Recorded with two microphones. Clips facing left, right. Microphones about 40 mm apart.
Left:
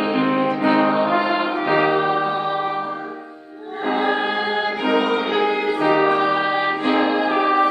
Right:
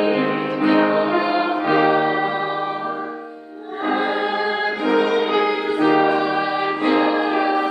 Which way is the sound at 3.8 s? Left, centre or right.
Centre.